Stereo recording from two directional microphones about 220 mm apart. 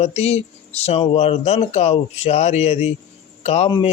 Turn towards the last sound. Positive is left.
turn(degrees=25)  # may be behind; listen again after turning